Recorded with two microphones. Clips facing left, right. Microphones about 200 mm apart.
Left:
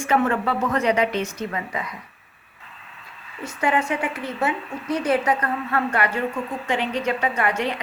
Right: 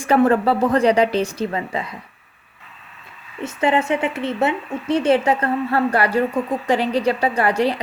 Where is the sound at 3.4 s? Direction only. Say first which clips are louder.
Right 4 dB; 25° right (ahead or behind).